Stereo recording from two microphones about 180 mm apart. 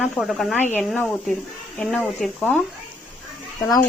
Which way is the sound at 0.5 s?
10° left (ahead or behind).